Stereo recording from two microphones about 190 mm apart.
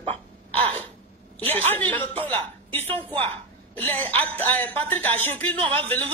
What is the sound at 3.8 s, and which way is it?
A woman's voice, 10° left (ahead or behind).